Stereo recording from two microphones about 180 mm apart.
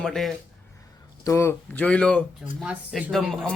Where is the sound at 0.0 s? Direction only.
Centre (ahead or behind).